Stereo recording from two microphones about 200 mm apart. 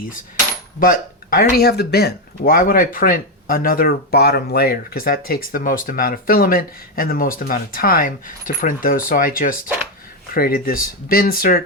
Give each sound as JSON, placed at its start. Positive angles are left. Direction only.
{"t": 0.8, "sound": "speech", "side_deg": 45}